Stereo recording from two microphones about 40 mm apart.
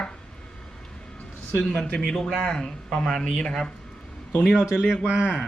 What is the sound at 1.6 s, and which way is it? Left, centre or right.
Speech, left.